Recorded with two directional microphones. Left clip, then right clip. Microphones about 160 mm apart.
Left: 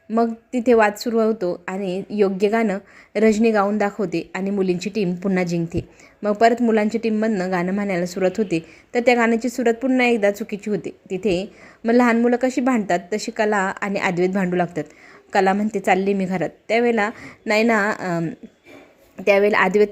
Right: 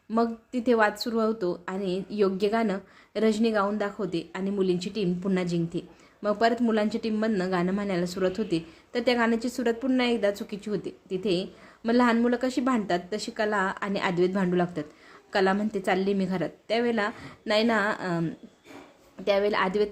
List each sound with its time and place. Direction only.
0.1 s a woman's voice: 20° left (ahead or behind)
1.8 s a woman's voice: 65° left (ahead or behind)
2.1 s a woman's voice: 20° left (ahead or behind)